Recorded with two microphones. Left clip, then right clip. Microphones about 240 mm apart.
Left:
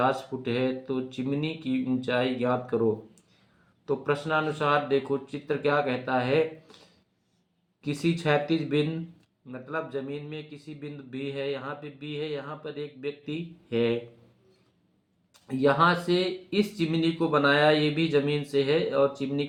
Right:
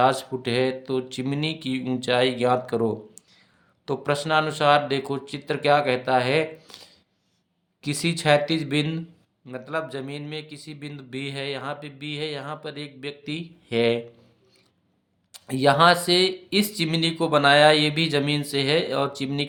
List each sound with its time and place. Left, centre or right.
0.0 s speech: right
3.8 s speech: right
7.8 s speech: right
15.3 s speech: right